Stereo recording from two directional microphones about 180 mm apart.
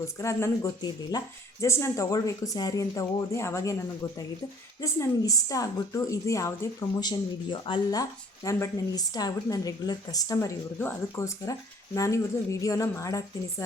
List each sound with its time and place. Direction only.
0.0 s a woman's voice: 15° left (ahead or behind)
4.8 s a woman's voice: 20° left (ahead or behind)